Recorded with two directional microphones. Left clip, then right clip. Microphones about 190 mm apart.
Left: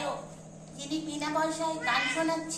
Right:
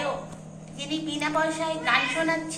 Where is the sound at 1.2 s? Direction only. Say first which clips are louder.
Right 4 dB; 5° right (ahead or behind).